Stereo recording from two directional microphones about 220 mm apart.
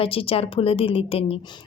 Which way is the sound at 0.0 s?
25° left (ahead or behind).